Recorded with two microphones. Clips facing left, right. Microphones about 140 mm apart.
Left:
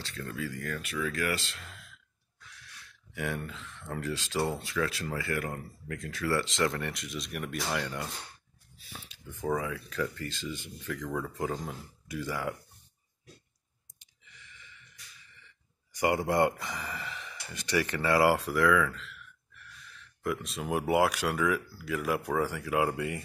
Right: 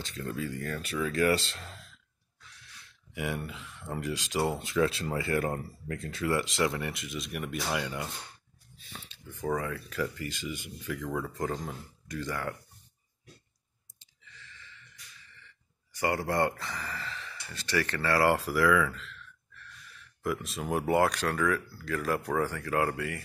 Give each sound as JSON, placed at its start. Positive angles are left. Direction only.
{"t": 0.0, "sound": "speech", "side_deg": -15}
{"t": 0.3, "sound": "speech", "side_deg": -30}
{"t": 3.2, "sound": "speech", "side_deg": -10}
{"t": 8.7, "sound": "speech", "side_deg": 10}
{"t": 13.9, "sound": "a sound", "side_deg": 15}
{"t": 15.3, "sound": "speech", "side_deg": 15}
{"t": 18.3, "sound": "speech", "side_deg": 0}
{"t": 19.1, "sound": "gasp", "side_deg": 10}
{"t": 20.2, "sound": "speech", "side_deg": 0}